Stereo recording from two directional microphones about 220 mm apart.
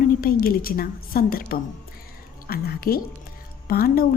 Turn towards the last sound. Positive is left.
turn(degrees=40)  # may be behind; listen again after turning